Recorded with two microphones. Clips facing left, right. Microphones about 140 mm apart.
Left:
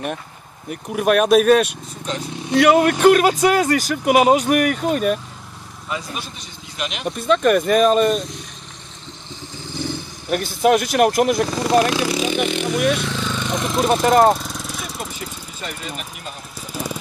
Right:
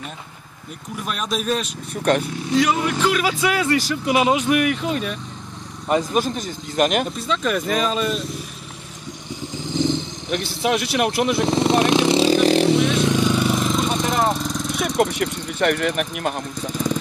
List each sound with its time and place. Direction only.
0.7 s speech: 65° left (ahead or behind)
2.1 s speech: 60° right (ahead or behind)
2.5 s speech: 60° left (ahead or behind)
5.9 s speech: 45° right (ahead or behind)
7.1 s speech: 55° left (ahead or behind)
9.3 s vehicle: 15° right (ahead or behind)
10.3 s speech: 45° left (ahead or behind)
11.4 s vehicle: 25° right (ahead or behind)
13.0 s a sound: 15° right (ahead or behind)
14.0 s speech: 50° left (ahead or behind)
14.3 s vehicle: 5° left (ahead or behind)
15.0 s speech: 70° right (ahead or behind)
16.7 s vehicle: 10° left (ahead or behind)